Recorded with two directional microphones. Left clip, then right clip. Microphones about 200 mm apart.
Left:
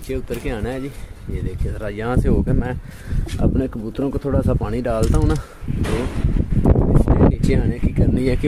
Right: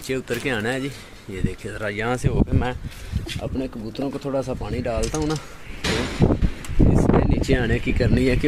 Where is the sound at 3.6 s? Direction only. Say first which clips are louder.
Left 5 dB; 45° left (ahead or behind).